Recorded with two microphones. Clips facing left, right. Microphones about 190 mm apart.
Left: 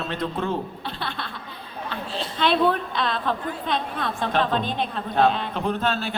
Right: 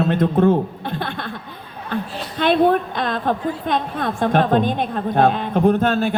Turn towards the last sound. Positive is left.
turn(degrees=-50)  # may be behind; listen again after turning